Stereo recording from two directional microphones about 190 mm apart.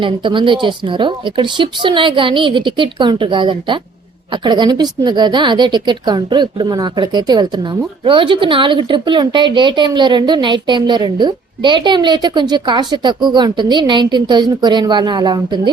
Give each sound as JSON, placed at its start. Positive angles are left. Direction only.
{"t": 0.0, "sound": "a woman's voice", "side_deg": -25}